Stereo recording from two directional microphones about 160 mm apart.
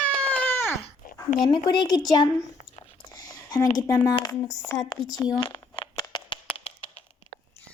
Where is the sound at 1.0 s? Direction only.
60° left (ahead or behind).